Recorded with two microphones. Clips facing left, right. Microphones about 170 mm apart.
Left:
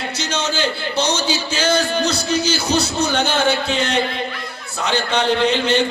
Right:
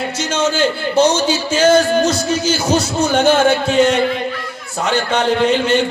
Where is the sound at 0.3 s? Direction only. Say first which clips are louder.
Right 6 dB; 50° right (ahead or behind).